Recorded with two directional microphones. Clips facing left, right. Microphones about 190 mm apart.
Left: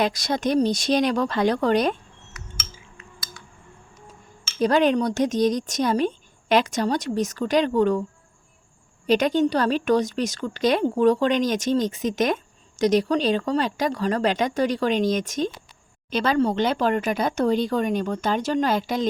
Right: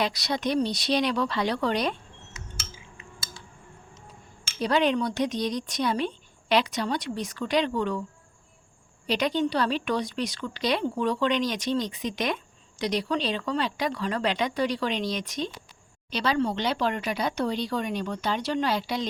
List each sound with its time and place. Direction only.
0.0 s a woman's voice: 45° left (ahead or behind)
2.7 s a sound: 25° right (ahead or behind)
4.6 s a woman's voice: 45° left (ahead or behind)
9.0 s a woman's voice: 45° left (ahead or behind)